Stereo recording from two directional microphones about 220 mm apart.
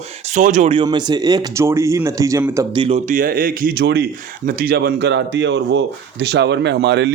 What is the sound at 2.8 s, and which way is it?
Speech, 30° right (ahead or behind).